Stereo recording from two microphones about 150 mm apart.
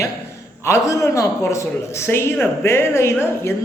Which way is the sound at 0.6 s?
20° left (ahead or behind).